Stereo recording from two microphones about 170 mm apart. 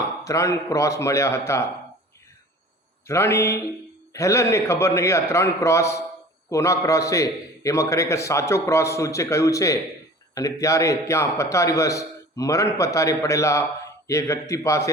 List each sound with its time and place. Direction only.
0.3 s a man's voice: 20° left (ahead or behind)
3.1 s a man's voice: 15° left (ahead or behind)